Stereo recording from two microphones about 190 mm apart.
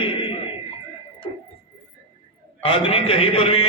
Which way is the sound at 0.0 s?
25° left (ahead or behind).